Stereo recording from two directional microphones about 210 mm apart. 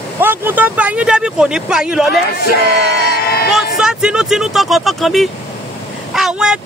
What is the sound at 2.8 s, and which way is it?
Music, 55° right (ahead or behind).